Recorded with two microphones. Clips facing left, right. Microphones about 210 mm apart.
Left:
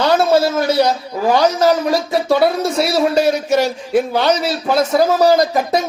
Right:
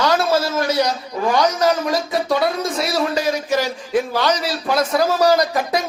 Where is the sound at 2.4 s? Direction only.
65° left (ahead or behind).